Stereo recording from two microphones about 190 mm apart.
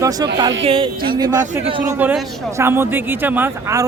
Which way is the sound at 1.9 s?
10° right (ahead or behind).